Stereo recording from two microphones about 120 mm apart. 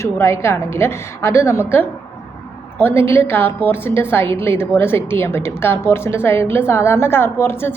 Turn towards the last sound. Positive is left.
turn(degrees=20)  # may be behind; listen again after turning